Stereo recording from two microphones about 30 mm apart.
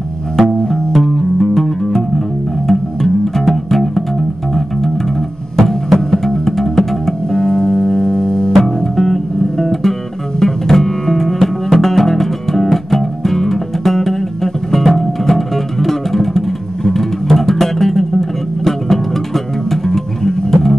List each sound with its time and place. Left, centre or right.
0.4 s music: centre
5.6 s music: centre
7.2 s music: left
8.5 s music: centre